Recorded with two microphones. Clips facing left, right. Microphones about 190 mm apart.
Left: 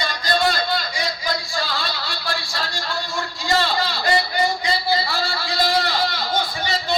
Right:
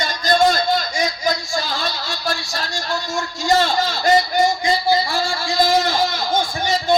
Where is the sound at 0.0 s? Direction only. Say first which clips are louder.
Right 5 dB; 45° right (ahead or behind).